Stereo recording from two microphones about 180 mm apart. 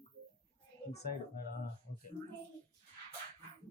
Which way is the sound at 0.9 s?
65° left (ahead or behind).